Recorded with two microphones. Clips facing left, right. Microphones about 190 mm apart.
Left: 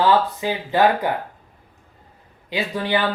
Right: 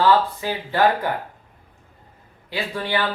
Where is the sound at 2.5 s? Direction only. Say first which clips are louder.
Left 3 dB; 15° left (ahead or behind).